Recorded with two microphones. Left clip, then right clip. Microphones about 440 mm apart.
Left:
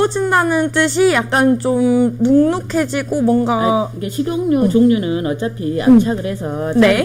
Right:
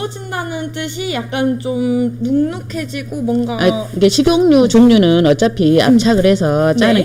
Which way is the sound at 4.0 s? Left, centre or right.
Right.